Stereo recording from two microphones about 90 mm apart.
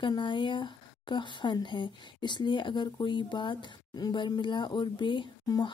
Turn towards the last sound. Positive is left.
turn(degrees=45)  # may be behind; listen again after turning